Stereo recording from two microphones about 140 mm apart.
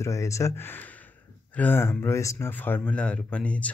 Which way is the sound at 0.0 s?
20° left (ahead or behind).